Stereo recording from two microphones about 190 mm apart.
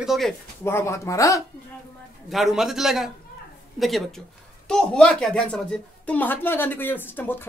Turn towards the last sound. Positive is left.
turn(degrees=10)  # may be behind; listen again after turning